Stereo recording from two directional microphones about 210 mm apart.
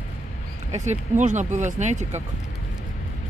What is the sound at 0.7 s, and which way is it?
Speech, 35° right (ahead or behind).